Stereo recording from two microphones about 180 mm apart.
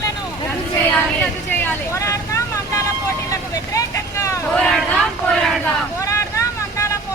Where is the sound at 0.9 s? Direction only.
10° left (ahead or behind).